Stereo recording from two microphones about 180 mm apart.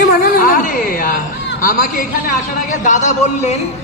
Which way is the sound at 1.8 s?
50° left (ahead or behind).